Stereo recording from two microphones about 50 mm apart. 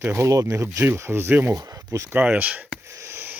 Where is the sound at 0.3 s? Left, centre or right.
Right.